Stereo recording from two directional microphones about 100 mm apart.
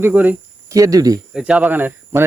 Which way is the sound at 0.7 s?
35° right (ahead or behind).